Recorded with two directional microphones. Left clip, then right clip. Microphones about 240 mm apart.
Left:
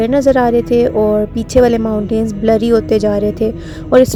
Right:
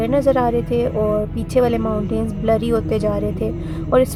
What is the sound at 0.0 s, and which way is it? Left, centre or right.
Speech, left.